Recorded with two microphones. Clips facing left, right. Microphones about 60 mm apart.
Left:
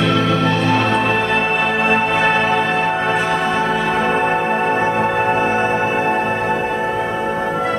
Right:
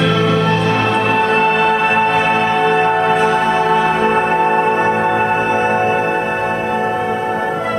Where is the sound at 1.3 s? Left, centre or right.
Right.